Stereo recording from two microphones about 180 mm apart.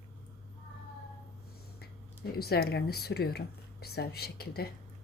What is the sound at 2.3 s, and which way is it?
Speech, 60° left (ahead or behind).